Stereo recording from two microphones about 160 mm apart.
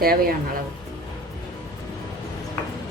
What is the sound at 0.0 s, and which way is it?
Speech, 70° right (ahead or behind).